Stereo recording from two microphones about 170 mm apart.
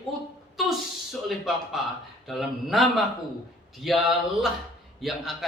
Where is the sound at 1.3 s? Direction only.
Centre (ahead or behind).